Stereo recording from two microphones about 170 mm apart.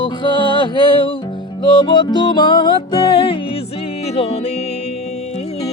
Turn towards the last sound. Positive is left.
turn(degrees=40)  # may be behind; listen again after turning